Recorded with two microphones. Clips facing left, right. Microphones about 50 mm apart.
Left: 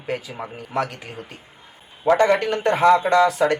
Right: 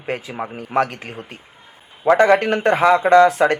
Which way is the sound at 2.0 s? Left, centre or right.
Right.